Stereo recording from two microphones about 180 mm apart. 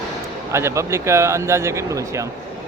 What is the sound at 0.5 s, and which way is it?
A man's voice, 15° right (ahead or behind).